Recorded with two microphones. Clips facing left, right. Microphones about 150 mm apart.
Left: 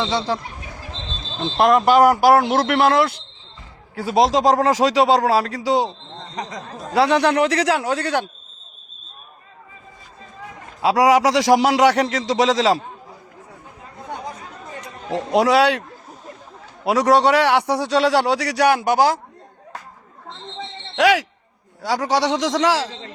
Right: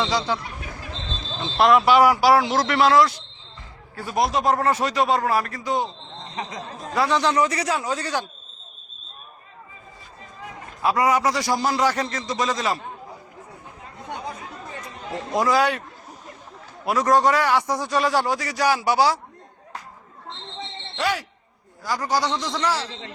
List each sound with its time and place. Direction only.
0.1 s speech: 25° left (ahead or behind)
1.4 s speech: 45° left (ahead or behind)
3.9 s speech: 90° left
6.3 s speech: 40° left (ahead or behind)
6.9 s a man's voice: 70° left (ahead or behind)
10.8 s speech: 90° left
15.3 s a man's voice: 75° left (ahead or behind)
16.8 s a man's voice: 80° left; by 19.2 s 50° left (ahead or behind)
20.9 s speech: 90° left
22.9 s speech: 35° left (ahead or behind)